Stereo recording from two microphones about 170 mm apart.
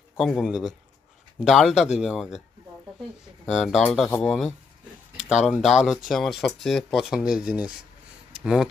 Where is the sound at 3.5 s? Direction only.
5° right (ahead or behind).